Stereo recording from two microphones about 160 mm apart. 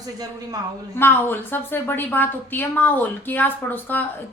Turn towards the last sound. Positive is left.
turn(degrees=10)  # may be behind; listen again after turning